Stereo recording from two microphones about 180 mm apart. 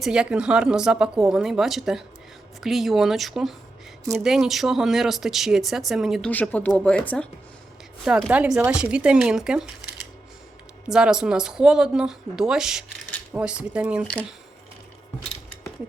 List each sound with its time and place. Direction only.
0.0 s speech: 5° right (ahead or behind)
6.3 s speech: 10° left (ahead or behind)
8.0 s speech: 5° right (ahead or behind)
10.8 s speech: 5° right (ahead or behind)